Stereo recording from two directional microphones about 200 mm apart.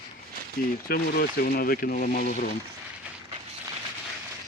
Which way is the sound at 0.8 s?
50° left (ahead or behind).